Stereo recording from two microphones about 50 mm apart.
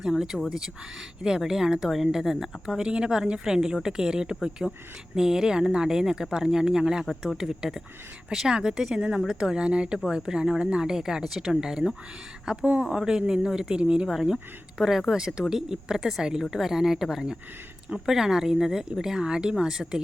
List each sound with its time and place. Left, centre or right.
0.0 s speech: centre
4.6 s speech: centre
14.1 s speech: centre